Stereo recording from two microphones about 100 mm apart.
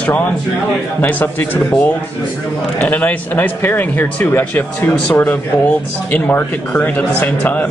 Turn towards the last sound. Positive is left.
turn(degrees=15)  # may be behind; listen again after turning